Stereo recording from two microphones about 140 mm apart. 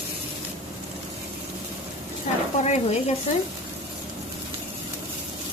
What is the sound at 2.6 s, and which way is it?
Speech, 50° left (ahead or behind).